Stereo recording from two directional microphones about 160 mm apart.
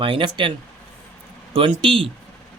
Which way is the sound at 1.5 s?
35° right (ahead or behind).